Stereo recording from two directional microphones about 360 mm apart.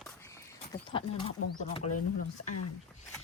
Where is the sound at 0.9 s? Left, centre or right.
Centre.